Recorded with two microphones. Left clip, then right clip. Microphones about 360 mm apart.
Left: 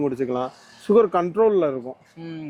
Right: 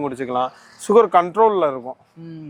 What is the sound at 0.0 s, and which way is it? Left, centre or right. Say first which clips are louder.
Speech: right 2 dB; right.